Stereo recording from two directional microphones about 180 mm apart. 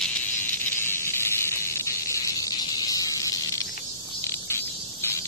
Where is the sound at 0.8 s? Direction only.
15° left (ahead or behind).